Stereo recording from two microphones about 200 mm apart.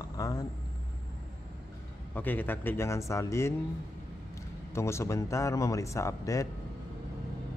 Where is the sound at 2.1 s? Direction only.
10° left (ahead or behind).